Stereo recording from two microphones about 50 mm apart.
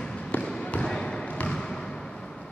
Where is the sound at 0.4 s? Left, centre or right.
Centre.